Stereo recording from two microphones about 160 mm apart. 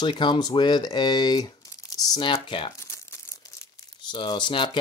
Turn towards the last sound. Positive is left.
turn(degrees=30)  # may be behind; listen again after turning